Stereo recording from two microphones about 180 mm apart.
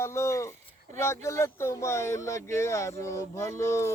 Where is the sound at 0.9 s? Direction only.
15° left (ahead or behind).